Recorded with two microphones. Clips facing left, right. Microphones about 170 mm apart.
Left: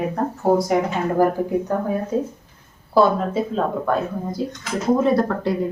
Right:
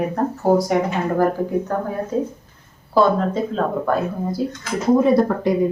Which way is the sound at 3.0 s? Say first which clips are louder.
Even; 5° left (ahead or behind).